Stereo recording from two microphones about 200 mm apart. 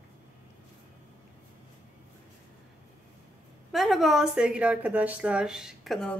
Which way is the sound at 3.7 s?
Centre (ahead or behind).